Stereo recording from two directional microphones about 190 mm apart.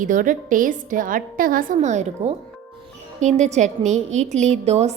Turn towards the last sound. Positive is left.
turn(degrees=-35)  # may be behind; listen again after turning